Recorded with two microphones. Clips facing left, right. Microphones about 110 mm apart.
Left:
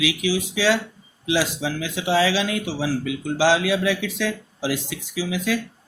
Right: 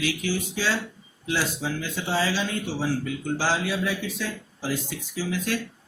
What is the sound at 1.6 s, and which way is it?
Speech, 90° left.